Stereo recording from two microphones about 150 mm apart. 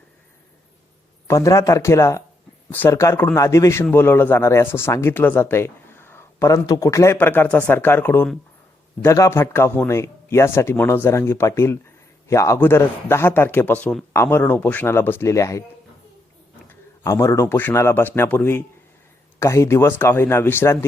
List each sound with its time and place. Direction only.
1.3 s speech: 20° left (ahead or behind)
17.0 s speech: 20° left (ahead or behind)